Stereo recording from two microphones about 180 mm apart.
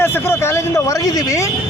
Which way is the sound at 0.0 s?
15° left (ahead or behind).